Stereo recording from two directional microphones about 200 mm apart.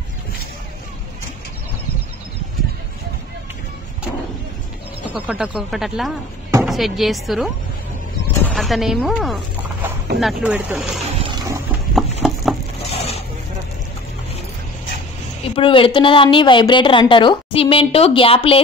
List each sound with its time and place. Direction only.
5.1 s speech: 5° right (ahead or behind)
8.5 s speech: centre (ahead or behind)
11.1 s a sound: 20° right (ahead or behind)
11.9 s clip-clop: centre (ahead or behind)
12.8 s a sound: 30° left (ahead or behind)
15.5 s a woman's voice: 25° left (ahead or behind)